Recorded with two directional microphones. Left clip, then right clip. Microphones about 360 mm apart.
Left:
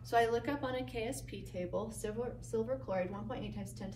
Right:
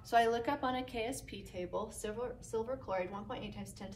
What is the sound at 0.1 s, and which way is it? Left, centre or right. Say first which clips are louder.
A woman's voice: right 1 dB; centre.